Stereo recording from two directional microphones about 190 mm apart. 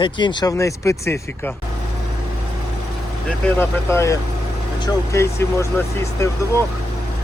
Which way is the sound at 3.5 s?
10° left (ahead or behind).